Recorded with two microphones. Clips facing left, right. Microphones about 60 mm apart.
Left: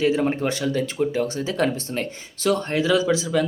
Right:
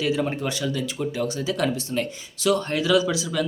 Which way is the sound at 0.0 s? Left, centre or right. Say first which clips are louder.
Left 4 dB; left.